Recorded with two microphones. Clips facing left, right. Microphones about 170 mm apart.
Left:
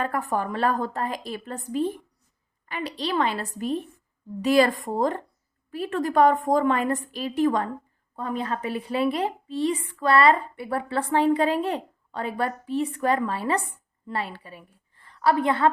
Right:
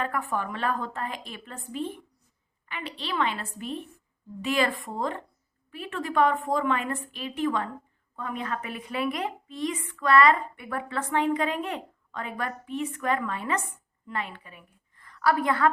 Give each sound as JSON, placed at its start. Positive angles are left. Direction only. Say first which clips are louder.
{"t": 0.0, "sound": "a woman's voice", "louder": "left 3 dB", "side_deg": 40}